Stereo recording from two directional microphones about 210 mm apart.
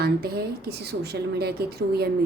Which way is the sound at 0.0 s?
50° right (ahead or behind).